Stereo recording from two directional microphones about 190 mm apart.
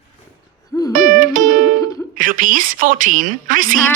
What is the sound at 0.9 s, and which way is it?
Music, 45° right (ahead or behind).